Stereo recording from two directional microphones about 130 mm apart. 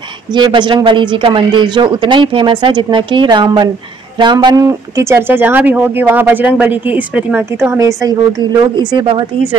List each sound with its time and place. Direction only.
0.3 s speech: 35° right (ahead or behind)
4.6 s speech: 20° right (ahead or behind)
7.7 s speech: 25° right (ahead or behind)